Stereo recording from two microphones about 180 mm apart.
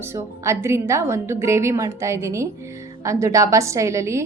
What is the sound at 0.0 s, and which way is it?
A woman's voice, 15° right (ahead or behind).